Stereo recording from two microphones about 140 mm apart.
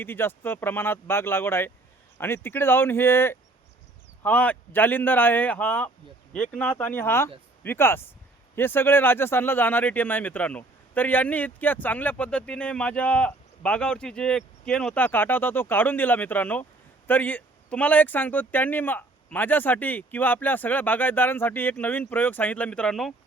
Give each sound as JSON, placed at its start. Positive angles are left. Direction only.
{"t": 0.0, "sound": "speech", "side_deg": 15}